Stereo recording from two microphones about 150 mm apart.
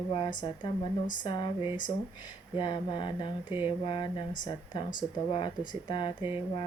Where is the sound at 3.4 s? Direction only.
10° right (ahead or behind).